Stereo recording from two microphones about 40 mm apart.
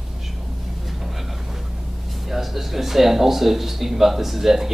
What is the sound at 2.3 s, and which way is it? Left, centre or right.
Speech, centre.